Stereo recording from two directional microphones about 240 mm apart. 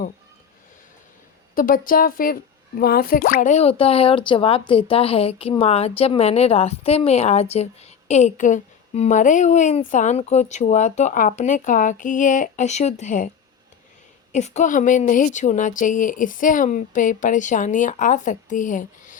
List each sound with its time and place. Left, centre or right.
1.5 s speech: left
14.3 s speech: left